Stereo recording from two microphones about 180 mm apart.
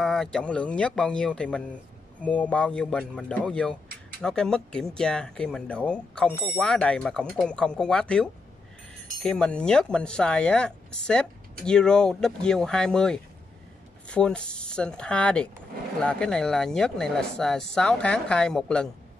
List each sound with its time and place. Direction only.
0.0 s speech: 5° left (ahead or behind)